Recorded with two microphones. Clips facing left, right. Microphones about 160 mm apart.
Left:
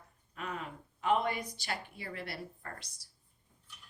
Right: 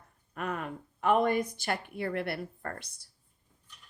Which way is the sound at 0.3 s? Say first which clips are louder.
Right 6 dB; 55° right (ahead or behind).